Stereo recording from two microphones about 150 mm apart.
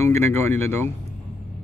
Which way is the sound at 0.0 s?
15° left (ahead or behind).